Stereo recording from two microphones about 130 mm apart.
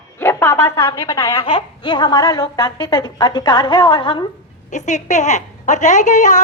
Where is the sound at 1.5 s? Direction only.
40° left (ahead or behind).